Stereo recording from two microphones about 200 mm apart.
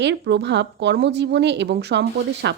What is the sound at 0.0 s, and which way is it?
Speech, 60° right (ahead or behind).